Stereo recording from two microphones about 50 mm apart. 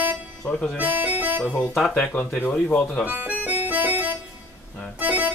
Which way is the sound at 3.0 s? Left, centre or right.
Right.